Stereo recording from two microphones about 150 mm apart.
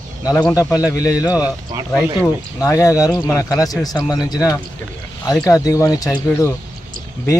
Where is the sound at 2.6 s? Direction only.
20° left (ahead or behind).